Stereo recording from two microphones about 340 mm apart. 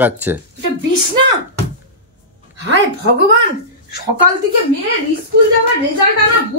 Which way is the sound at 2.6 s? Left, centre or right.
Right.